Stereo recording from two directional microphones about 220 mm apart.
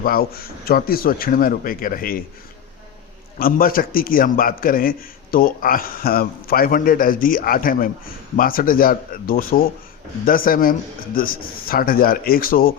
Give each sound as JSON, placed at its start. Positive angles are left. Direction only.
{"t": 0.0, "sound": "a man's voice", "side_deg": 40}
{"t": 3.3, "sound": "a man's voice", "side_deg": 40}